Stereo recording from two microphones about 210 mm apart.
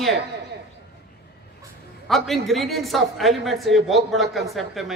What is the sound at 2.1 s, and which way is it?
A woman's voice, centre (ahead or behind).